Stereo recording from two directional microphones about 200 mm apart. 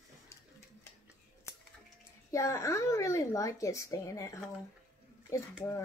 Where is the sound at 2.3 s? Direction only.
15° left (ahead or behind).